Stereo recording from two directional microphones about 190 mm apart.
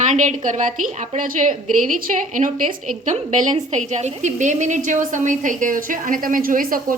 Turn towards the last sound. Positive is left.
turn(degrees=-45)  # may be behind; listen again after turning